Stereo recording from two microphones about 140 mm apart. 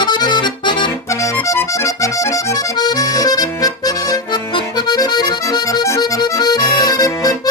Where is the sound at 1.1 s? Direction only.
20° left (ahead or behind).